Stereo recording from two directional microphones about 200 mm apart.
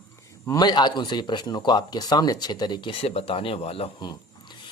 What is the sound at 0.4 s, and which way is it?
A man's voice, 20° left (ahead or behind).